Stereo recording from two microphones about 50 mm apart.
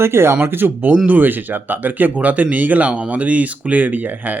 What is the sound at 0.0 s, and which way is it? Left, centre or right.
Speech, right.